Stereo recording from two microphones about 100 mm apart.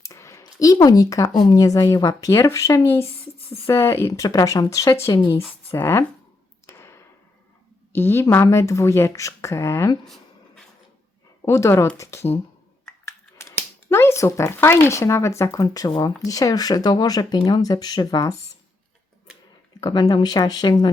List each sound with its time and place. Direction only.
0.0 s speech: 30° left (ahead or behind)
3.3 s a sound: 75° left (ahead or behind)
3.7 s speech: 25° left (ahead or behind)
6.7 s arrow: 30° left (ahead or behind)
7.9 s speech: 25° left (ahead or behind)
10.0 s a sound: 5° left (ahead or behind)
11.4 s speech: 30° left (ahead or behind)
19.8 s speech: 45° left (ahead or behind)